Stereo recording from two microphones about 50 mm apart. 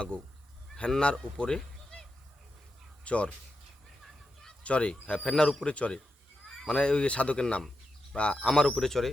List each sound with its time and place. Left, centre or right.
0.9 s speech: centre
3.0 s speech: left
4.6 s a man's voice: left
5.6 s a man's voice: left; by 9.0 s centre